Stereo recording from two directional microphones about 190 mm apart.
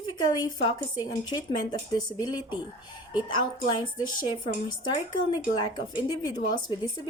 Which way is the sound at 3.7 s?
25° left (ahead or behind).